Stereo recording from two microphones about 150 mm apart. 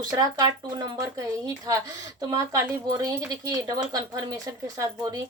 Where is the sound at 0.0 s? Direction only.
25° right (ahead or behind).